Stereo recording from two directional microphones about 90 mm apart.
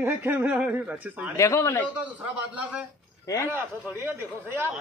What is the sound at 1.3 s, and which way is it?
Speech, 35° left (ahead or behind).